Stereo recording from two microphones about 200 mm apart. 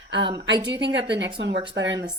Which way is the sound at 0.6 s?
60° right (ahead or behind).